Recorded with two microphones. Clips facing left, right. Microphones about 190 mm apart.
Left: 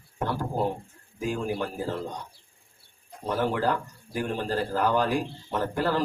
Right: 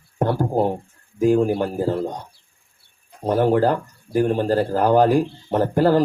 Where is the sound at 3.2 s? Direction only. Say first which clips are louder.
Right 9 dB; 45° right (ahead or behind).